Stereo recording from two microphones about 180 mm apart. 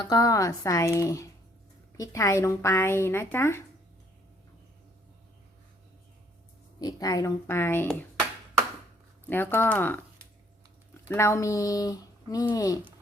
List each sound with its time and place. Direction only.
0.0 s speech: 20° left (ahead or behind)
6.7 s speech: 20° left (ahead or behind)
9.3 s speech: 10° left (ahead or behind)